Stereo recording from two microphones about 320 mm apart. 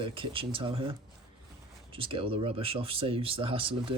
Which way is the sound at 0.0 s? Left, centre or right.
Centre.